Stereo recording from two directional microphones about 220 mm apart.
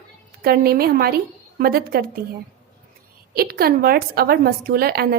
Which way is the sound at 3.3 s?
45° right (ahead or behind).